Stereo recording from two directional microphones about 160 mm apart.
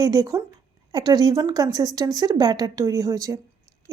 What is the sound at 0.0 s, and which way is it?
A woman's voice, 25° right (ahead or behind).